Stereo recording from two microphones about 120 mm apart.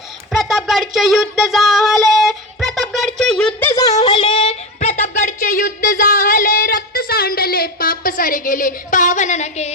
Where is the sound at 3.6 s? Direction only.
25° left (ahead or behind).